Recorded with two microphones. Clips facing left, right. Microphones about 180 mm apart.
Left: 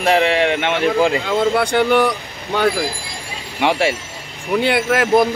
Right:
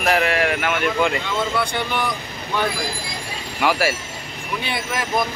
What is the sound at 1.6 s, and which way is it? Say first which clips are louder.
Speech: left 9 dB; 80° left.